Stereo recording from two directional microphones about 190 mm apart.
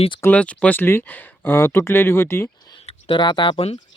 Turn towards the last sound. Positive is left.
turn(degrees=30)  # may be behind; listen again after turning